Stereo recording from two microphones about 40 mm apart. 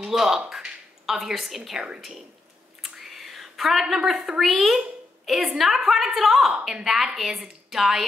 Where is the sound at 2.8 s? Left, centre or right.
Centre.